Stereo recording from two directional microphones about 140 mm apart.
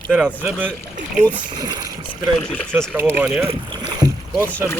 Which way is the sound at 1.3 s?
30° right (ahead or behind).